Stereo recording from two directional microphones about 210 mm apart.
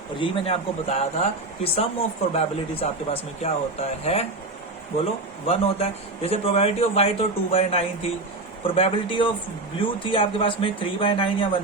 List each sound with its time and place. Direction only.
0.2 s speech: 25° left (ahead or behind)
5.5 s speech: 30° left (ahead or behind)